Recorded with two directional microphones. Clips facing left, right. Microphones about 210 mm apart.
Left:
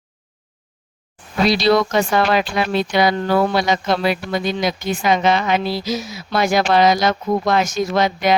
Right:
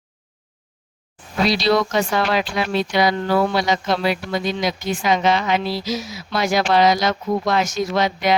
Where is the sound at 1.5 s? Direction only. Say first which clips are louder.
Left 3 dB; 55° left (ahead or behind).